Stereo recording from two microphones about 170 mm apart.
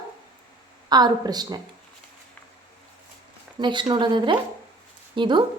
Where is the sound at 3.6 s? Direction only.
25° right (ahead or behind).